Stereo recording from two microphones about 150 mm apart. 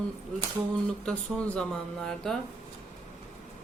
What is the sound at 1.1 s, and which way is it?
Speech, 5° left (ahead or behind).